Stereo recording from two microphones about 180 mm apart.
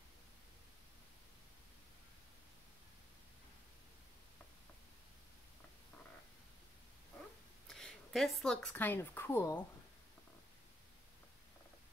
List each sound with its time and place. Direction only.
7.6 s a woman's voice: centre (ahead or behind)